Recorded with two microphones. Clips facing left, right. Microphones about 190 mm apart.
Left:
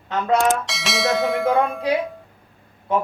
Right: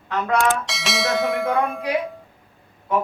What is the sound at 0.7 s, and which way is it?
Bell, centre (ahead or behind).